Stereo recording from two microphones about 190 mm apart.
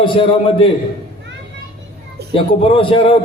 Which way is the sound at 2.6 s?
30° left (ahead or behind).